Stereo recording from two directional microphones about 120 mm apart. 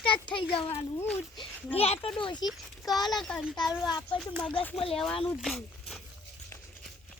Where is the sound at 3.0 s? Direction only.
Centre (ahead or behind).